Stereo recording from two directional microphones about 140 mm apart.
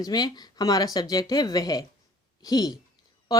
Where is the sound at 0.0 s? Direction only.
30° left (ahead or behind).